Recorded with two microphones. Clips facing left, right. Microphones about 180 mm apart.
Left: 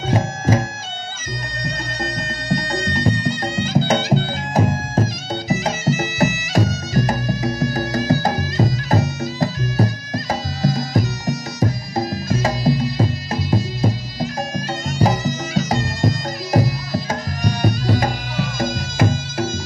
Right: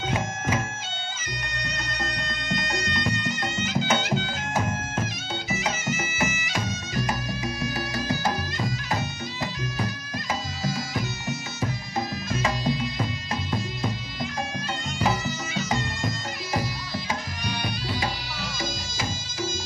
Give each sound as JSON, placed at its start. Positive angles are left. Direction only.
{"t": 0.1, "sound": "music", "side_deg": 35}
{"t": 2.5, "sound": "music", "side_deg": 35}